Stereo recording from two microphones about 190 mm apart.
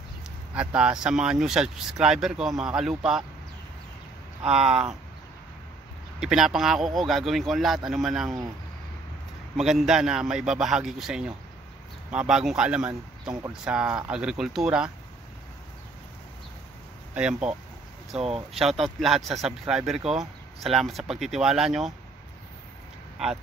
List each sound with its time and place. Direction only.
0.6 s speech: 5° right (ahead or behind)
4.5 s speech: 5° right (ahead or behind)
6.1 s speech: centre (ahead or behind)
9.6 s speech: centre (ahead or behind)
17.1 s speech: 5° right (ahead or behind)
18.2 s speech: 30° right (ahead or behind)
18.6 s speech: centre (ahead or behind)